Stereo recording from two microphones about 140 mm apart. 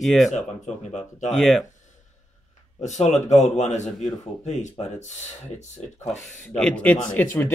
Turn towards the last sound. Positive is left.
turn(degrees=15)  # may be behind; listen again after turning